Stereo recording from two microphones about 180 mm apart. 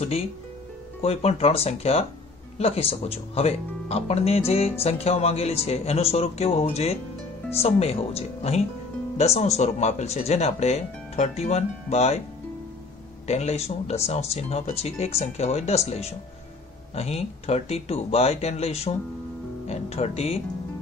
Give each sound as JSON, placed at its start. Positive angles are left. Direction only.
{"t": 1.0, "sound": "speech", "side_deg": 35}
{"t": 13.3, "sound": "speech", "side_deg": 35}